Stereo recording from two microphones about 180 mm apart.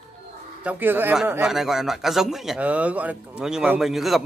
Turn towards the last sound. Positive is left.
turn(degrees=0)  # may be behind; listen again after turning